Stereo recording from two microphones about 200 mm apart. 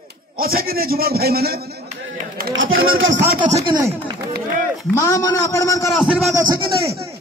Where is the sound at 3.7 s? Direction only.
20° right (ahead or behind).